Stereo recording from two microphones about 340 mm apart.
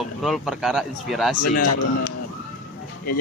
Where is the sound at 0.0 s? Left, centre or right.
Centre.